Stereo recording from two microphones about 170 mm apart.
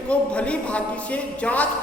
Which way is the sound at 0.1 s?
5° left (ahead or behind).